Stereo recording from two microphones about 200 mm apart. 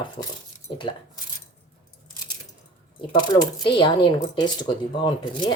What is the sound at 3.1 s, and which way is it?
A woman's voice, 20° left (ahead or behind).